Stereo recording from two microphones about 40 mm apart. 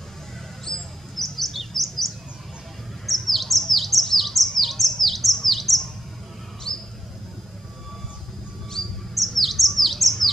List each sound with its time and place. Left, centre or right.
0.7 s chirp: centre
6.7 s a sound: centre
8.8 s chirp: centre
9.1 s chirp: centre